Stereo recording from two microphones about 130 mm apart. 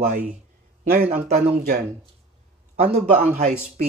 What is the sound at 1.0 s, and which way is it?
Speech, 60° right (ahead or behind).